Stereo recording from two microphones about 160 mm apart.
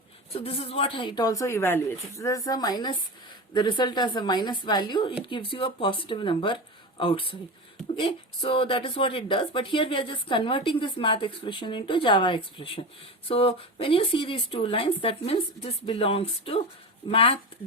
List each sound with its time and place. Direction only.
0.3 s a woman's voice: 40° left (ahead or behind)